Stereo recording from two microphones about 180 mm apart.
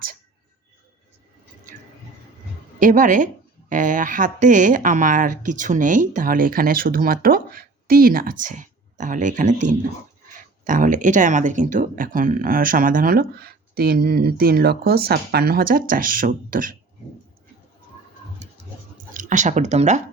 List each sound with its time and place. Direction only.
2.7 s speech: 45° right (ahead or behind)
19.1 s speech: 45° right (ahead or behind)